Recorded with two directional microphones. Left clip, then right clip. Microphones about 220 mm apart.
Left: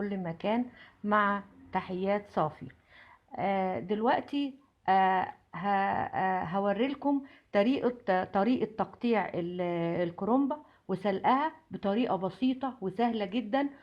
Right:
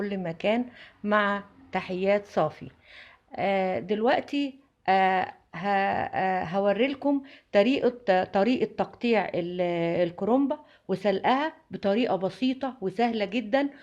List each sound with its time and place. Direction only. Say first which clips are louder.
0.0 s speech: right 6 dB; 30° right (ahead or behind)